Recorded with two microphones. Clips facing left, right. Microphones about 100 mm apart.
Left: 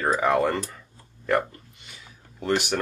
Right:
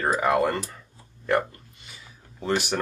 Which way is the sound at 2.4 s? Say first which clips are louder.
Left 1 dB; centre (ahead or behind).